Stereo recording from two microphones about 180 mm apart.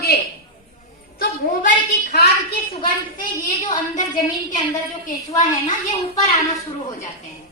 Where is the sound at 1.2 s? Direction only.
55° left (ahead or behind).